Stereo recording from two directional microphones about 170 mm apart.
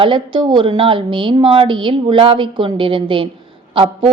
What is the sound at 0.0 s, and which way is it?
A woman's voice, 30° right (ahead or behind).